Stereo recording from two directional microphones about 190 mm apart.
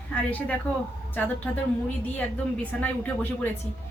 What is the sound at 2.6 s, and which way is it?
Speech, 10° left (ahead or behind).